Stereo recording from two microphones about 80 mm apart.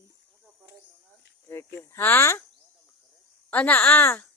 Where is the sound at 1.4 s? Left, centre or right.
Left.